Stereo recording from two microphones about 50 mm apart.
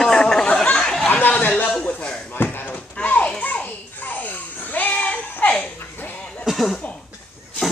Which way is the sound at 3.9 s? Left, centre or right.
Left.